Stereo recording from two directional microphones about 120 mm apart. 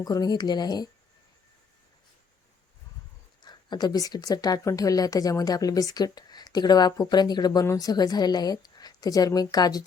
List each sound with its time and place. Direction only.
0.0 s speech: 30° left (ahead or behind)
3.4 s speech: 35° left (ahead or behind)